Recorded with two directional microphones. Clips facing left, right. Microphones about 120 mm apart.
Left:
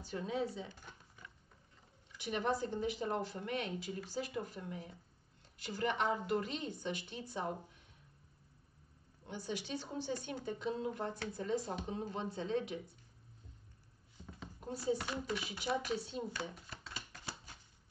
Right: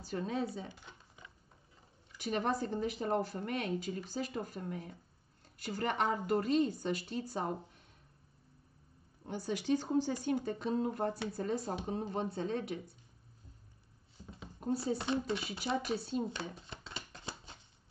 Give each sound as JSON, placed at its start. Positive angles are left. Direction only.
{"t": 0.0, "sound": "a woman's voice", "side_deg": -40}
{"t": 0.7, "sound": "a sound", "side_deg": -15}
{"t": 2.3, "sound": "a woman's voice", "side_deg": -40}
{"t": 9.3, "sound": "a woman's voice", "side_deg": -40}
{"t": 14.6, "sound": "speech", "side_deg": -30}